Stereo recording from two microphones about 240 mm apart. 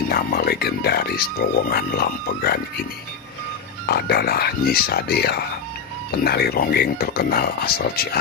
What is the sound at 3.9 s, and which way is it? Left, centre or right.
Speech, left.